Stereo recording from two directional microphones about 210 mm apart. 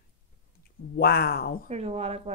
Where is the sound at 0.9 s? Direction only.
50° left (ahead or behind).